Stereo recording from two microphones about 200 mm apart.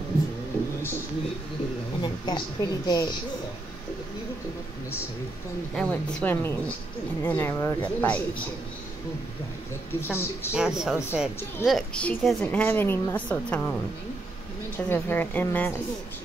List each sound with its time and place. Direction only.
2.0 s a woman's voice: 25° left (ahead or behind)
5.8 s a woman's voice: 5° left (ahead or behind)
9.9 s a woman's voice: 10° left (ahead or behind)
10.5 s a woman's voice: 5° right (ahead or behind)
14.9 s a woman's voice: 10° left (ahead or behind)